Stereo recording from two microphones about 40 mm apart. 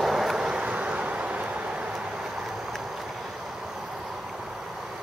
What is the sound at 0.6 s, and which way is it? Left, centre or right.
Vehicle, right.